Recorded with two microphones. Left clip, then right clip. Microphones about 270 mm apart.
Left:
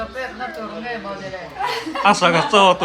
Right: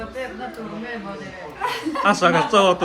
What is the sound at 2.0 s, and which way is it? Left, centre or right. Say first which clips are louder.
Speech: left 2 dB; centre.